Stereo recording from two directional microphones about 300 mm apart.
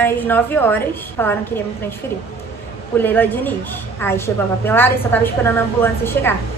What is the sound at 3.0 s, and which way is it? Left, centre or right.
A woman's voice, centre.